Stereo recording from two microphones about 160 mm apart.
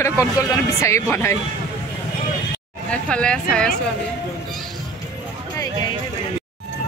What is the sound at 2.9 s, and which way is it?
Speech, 5° left (ahead or behind).